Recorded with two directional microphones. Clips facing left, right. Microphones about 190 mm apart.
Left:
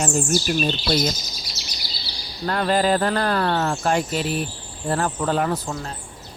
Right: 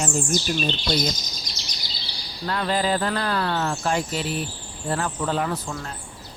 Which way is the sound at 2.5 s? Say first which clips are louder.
Left 4 dB; 50° left (ahead or behind).